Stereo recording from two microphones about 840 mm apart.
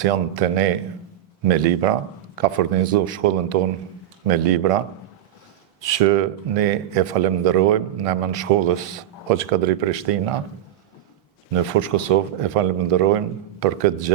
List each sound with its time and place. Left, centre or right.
0.0 s speech: right
5.8 s speech: right
11.8 s speech: right